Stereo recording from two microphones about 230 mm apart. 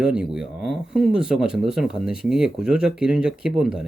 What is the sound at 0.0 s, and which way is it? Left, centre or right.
Speech, centre.